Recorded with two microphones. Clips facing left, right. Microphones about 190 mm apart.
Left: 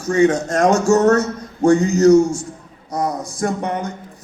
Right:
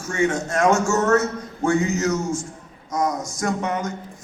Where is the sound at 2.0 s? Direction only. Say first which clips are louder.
Left 11 dB; 35° left (ahead or behind).